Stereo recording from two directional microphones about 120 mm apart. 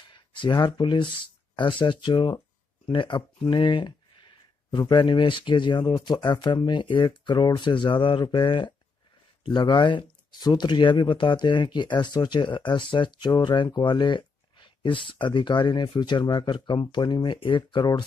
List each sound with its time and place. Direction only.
0.3 s speech: 40° left (ahead or behind)